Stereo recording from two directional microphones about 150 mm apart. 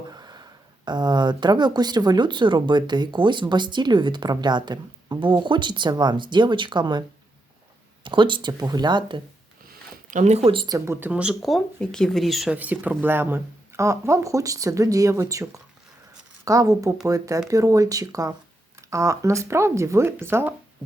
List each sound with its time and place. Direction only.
0.1 s a sound: 25° right (ahead or behind)
0.9 s speech: 30° right (ahead or behind)
8.0 s speech: 30° right (ahead or behind)
9.6 s speech: 60° right (ahead or behind); by 11.1 s 20° right (ahead or behind)
11.1 s speech: 5° right (ahead or behind)